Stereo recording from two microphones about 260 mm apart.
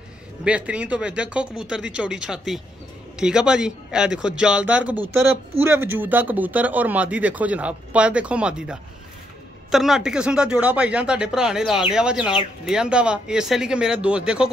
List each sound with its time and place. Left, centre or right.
0.4 s speech: centre